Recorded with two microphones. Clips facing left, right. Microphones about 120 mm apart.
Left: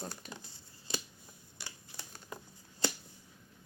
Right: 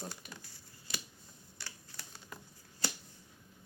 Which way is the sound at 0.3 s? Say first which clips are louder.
Left 3 dB; 25° left (ahead or behind).